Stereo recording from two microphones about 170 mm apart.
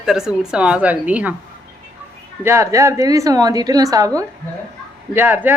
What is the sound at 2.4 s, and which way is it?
A woman's voice, 15° right (ahead or behind).